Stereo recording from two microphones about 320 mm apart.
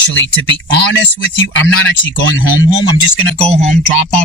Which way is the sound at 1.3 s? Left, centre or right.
Left.